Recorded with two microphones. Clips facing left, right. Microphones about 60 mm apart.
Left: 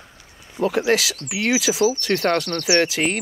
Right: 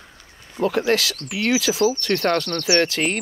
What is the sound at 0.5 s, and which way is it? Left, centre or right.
Speech, centre.